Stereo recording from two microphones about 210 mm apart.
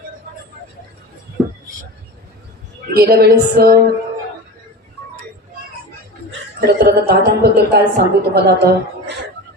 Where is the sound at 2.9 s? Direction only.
50° right (ahead or behind).